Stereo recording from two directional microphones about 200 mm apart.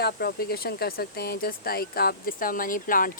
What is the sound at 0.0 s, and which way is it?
Speech, 50° left (ahead or behind).